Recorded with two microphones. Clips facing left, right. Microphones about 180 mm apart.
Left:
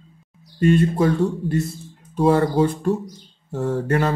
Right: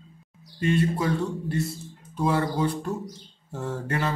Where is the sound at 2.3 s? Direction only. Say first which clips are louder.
Left 7 dB; 50° left (ahead or behind).